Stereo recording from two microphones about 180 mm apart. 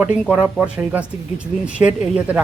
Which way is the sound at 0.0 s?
10° right (ahead or behind).